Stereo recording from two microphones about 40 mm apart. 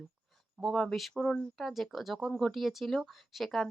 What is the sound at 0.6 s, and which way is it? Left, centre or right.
Speech, centre.